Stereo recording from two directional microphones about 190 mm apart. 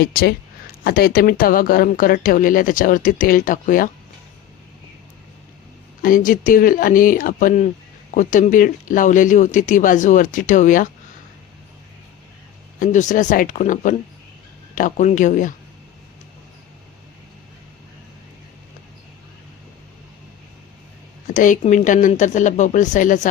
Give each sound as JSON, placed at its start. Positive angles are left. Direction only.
{"t": 0.0, "sound": "speech", "side_deg": 55}
{"t": 6.0, "sound": "speech", "side_deg": 45}
{"t": 12.8, "sound": "a woman's voice", "side_deg": 40}
{"t": 21.2, "sound": "a woman's voice", "side_deg": 40}